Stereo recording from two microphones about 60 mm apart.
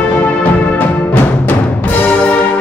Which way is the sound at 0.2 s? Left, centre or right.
Left.